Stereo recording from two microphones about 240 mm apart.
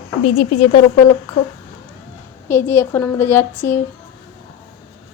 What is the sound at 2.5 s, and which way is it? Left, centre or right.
Speech, centre.